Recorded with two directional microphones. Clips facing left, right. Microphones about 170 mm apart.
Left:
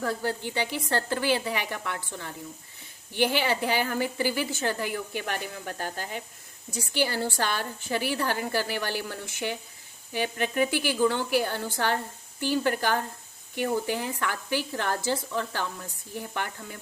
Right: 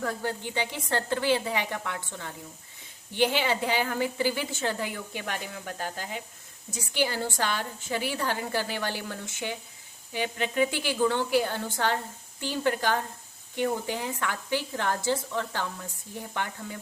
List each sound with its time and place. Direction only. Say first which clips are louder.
0.0 s a woman's voice: left 2 dB; 20° right (ahead or behind)
3.2 s a woman's voice: even; 20° right (ahead or behind)